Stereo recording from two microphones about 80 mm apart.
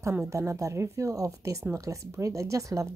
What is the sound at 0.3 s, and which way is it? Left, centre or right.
Speech, right.